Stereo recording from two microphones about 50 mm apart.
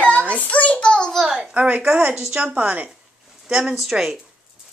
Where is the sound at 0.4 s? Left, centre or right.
Left.